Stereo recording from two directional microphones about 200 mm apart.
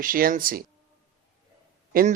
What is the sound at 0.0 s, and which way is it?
Speech, 45° right (ahead or behind).